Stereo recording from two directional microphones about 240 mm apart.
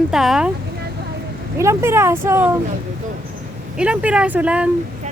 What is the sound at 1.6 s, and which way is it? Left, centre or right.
Speech, centre.